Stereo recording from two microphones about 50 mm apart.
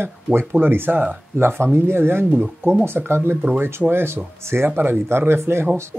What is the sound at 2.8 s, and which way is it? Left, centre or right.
Speech, right.